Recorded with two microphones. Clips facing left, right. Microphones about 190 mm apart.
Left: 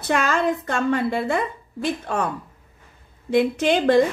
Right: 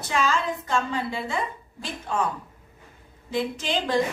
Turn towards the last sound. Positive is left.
turn(degrees=60)  # may be behind; listen again after turning